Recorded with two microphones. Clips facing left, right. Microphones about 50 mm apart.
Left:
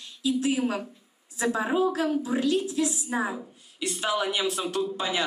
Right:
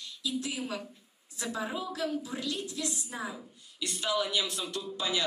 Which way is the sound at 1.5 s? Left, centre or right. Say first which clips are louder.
Left 7 dB; left.